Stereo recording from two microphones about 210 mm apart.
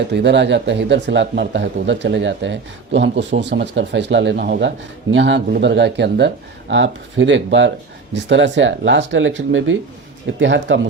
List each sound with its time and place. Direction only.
0.1 s speech: 55° right (ahead or behind)